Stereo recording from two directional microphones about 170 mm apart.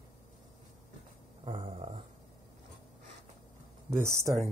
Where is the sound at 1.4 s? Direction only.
30° right (ahead or behind).